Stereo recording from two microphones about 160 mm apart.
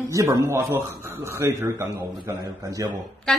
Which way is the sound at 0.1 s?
20° right (ahead or behind).